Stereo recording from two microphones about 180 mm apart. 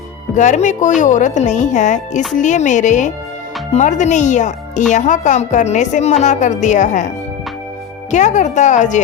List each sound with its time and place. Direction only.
0.3 s a woman's voice: 40° left (ahead or behind)
8.1 s a woman's voice: 40° left (ahead or behind)